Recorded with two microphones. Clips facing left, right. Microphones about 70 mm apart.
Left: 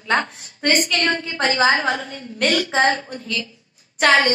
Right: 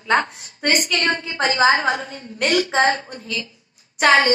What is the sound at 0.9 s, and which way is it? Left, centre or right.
Speech, right.